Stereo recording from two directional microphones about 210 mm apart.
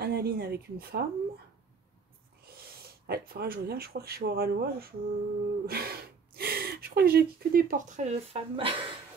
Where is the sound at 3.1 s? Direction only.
50° right (ahead or behind); by 8.7 s 25° right (ahead or behind).